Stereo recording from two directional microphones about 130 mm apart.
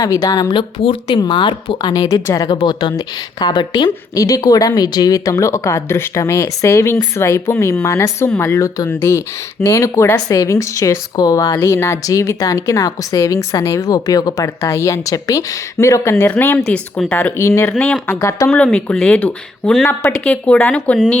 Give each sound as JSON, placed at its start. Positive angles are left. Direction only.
{"t": 0.0, "sound": "speech", "side_deg": 30}
{"t": 2.6, "sound": "speech", "side_deg": 40}
{"t": 16.6, "sound": "speech", "side_deg": 5}
{"t": 18.5, "sound": "speech", "side_deg": 10}